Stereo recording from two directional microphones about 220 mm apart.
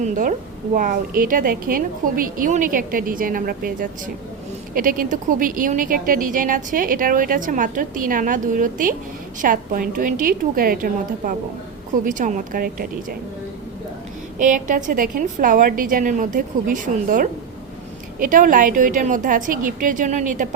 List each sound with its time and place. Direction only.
0.0 s speech: 35° right (ahead or behind)
14.3 s speech: 35° right (ahead or behind)